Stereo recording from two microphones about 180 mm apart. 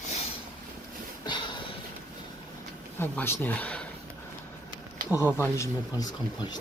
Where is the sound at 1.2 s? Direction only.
25° left (ahead or behind).